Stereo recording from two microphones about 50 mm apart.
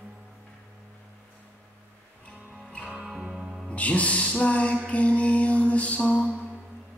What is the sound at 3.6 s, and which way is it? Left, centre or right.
Music, left.